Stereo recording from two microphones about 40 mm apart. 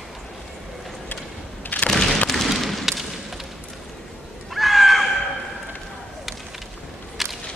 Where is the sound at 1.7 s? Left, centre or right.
Left.